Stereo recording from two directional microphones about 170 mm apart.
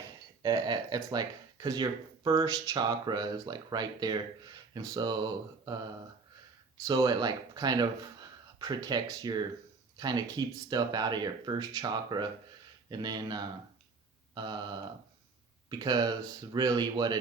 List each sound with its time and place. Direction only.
0.4 s speech: 20° right (ahead or behind)
6.8 s speech: 20° right (ahead or behind)